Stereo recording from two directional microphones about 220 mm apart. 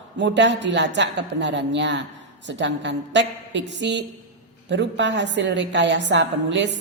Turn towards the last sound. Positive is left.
turn(degrees=-55)  # may be behind; listen again after turning